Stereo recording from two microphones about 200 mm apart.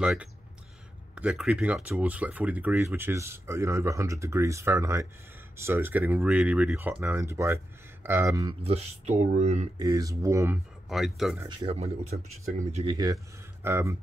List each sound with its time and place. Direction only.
0.0 s speech: 5° right (ahead or behind)
8.6 s speech: 30° right (ahead or behind)
9.8 s speech: 15° right (ahead or behind)
10.9 s speech: centre (ahead or behind)
11.4 s speech: 25° right (ahead or behind)